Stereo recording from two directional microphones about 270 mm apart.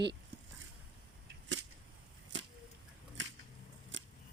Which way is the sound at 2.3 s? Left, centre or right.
Right.